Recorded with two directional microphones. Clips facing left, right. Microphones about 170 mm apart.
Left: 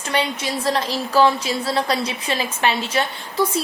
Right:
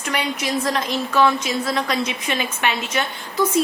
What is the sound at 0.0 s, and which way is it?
A woman's voice, 30° left (ahead or behind).